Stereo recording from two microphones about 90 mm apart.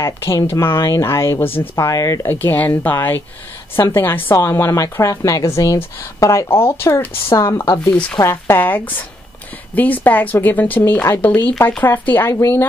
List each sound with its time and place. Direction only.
0.0 s a woman's voice: 30° left (ahead or behind)
1.8 s a woman's voice: 40° left (ahead or behind)
2.2 s a woman's voice: 20° left (ahead or behind)